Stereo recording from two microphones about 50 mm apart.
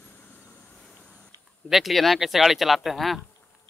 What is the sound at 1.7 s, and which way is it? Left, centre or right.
Speech, centre.